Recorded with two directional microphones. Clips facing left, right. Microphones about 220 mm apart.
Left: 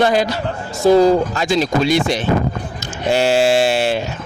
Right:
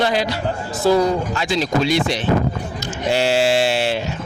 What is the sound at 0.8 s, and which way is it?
Speech, 25° left (ahead or behind).